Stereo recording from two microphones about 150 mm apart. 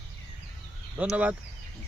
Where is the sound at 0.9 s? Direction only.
10° right (ahead or behind).